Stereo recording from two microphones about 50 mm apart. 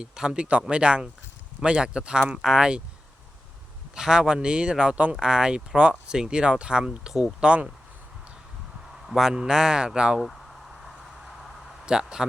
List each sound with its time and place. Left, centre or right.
0.0 s speech: centre
3.9 s speech: centre
7.4 s speech: right
9.0 s a man's voice: centre
11.9 s speech: centre